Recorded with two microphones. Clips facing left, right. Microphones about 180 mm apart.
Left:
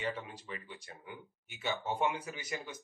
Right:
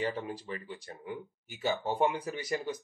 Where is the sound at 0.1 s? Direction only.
35° right (ahead or behind).